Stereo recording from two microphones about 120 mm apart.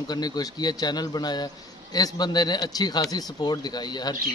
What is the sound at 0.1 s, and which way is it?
A man's voice, 35° left (ahead or behind).